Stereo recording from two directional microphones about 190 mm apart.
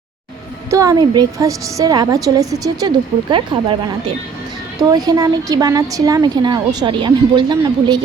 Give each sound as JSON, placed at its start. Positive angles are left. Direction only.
{"t": 0.7, "sound": "a woman's voice", "side_deg": -20}
{"t": 4.8, "sound": "a woman's voice", "side_deg": -20}